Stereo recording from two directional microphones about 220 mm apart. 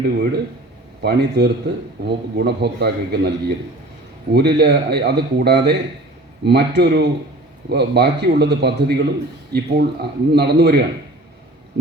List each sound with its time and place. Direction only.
1.0 s a man's voice: 50° right (ahead or behind)